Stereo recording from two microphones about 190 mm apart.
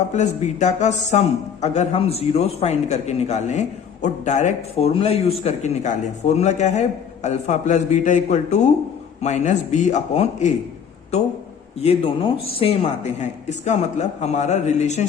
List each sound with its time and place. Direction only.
0.1 s a man's voice: 40° left (ahead or behind)
11.8 s a man's voice: 30° left (ahead or behind)